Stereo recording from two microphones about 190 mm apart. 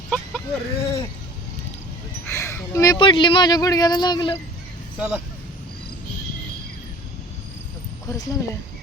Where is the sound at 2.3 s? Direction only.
15° left (ahead or behind).